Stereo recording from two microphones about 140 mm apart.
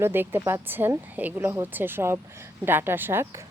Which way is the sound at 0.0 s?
15° right (ahead or behind).